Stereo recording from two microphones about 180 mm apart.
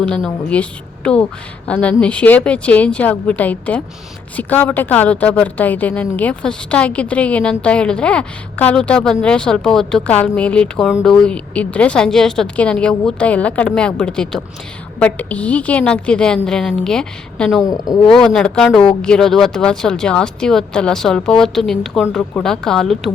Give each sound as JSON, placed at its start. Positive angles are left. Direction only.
{"t": 0.0, "sound": "a woman's voice", "side_deg": 5}
{"t": 17.6, "sound": "a woman's voice", "side_deg": 20}
{"t": 18.0, "sound": "a woman's voice", "side_deg": 5}